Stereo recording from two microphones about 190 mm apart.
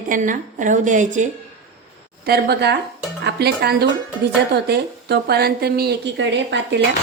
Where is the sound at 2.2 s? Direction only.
60° right (ahead or behind).